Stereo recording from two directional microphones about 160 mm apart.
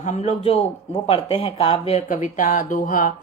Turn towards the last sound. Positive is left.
turn(degrees=55)  # may be behind; listen again after turning